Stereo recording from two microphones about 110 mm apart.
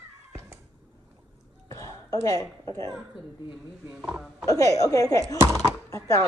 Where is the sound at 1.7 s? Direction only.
30° left (ahead or behind).